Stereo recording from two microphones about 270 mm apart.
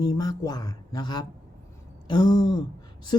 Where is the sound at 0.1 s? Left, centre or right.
Centre.